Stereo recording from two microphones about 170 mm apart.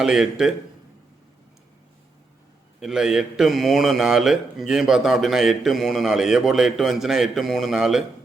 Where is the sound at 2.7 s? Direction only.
5° right (ahead or behind).